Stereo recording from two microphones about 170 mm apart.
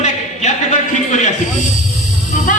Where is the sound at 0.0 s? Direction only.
45° left (ahead or behind).